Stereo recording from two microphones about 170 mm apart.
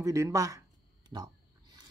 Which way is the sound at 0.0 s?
20° right (ahead or behind).